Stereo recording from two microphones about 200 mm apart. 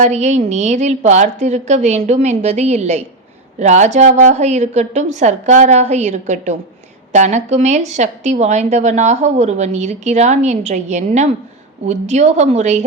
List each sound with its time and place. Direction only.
0.0 s a woman's voice: 35° right (ahead or behind)